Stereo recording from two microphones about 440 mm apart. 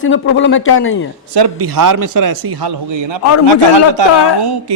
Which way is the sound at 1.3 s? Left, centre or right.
Right.